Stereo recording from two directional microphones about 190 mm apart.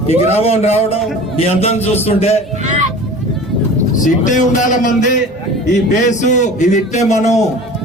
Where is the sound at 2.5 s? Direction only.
40° right (ahead or behind).